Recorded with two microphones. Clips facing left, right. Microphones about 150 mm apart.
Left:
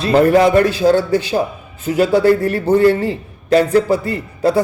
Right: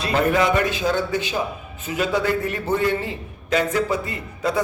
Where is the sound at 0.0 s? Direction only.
35° left (ahead or behind).